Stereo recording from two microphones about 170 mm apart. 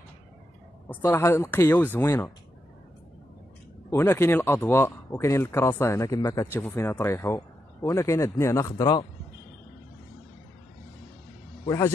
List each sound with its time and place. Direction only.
0.8 s speech: 15° left (ahead or behind)
3.9 s speech: 15° left (ahead or behind)
11.6 s a man's voice: 20° left (ahead or behind)